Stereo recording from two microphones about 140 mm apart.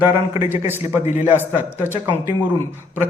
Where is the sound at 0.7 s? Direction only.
15° right (ahead or behind).